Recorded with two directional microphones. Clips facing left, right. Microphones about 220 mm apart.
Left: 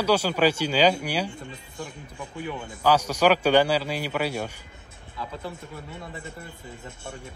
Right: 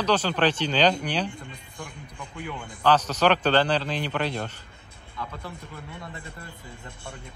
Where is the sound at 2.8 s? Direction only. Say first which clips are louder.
Left 1 dB; 10° left (ahead or behind).